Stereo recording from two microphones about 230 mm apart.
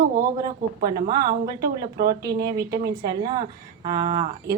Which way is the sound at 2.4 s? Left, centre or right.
Centre.